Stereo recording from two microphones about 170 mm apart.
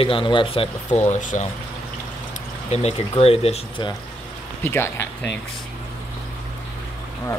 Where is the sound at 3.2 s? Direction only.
35° left (ahead or behind).